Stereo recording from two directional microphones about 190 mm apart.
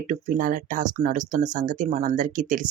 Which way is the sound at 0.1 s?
45° right (ahead or behind).